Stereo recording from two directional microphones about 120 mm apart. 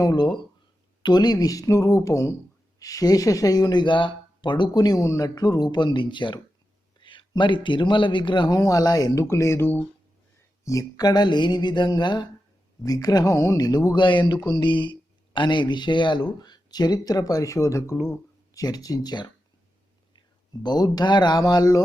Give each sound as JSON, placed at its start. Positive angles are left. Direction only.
{"t": 0.0, "sound": "speech", "side_deg": 35}